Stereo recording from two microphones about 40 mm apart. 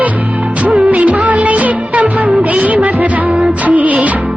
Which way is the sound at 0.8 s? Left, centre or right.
Right.